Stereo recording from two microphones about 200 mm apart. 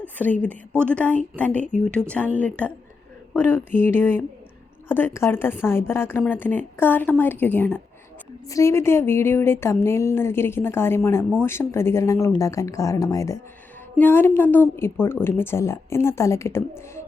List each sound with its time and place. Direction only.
0.4 s speech: 10° left (ahead or behind)